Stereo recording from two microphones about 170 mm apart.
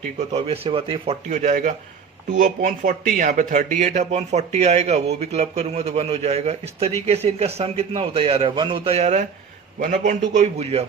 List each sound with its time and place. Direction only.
0.3 s speech: 35° right (ahead or behind)